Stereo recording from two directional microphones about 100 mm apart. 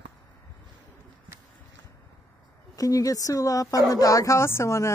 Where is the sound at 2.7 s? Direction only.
35° left (ahead or behind).